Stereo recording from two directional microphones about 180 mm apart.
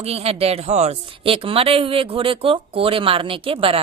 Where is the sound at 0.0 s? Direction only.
35° right (ahead or behind).